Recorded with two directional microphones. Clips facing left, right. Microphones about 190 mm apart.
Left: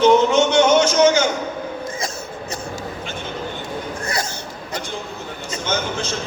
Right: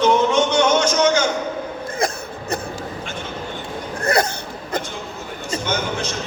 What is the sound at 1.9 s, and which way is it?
Cough, 60° right (ahead or behind).